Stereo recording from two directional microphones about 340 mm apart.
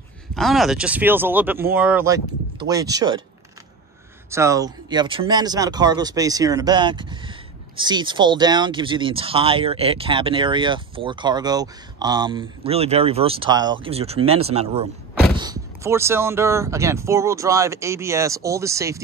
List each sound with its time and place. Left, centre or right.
0.3 s speech: centre
4.3 s speech: centre